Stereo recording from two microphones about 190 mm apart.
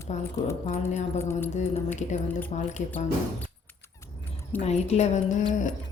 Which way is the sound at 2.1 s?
40° left (ahead or behind).